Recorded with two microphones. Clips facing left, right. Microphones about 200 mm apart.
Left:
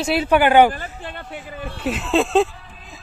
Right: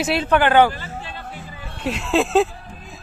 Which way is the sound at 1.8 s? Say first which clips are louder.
Even; centre (ahead or behind).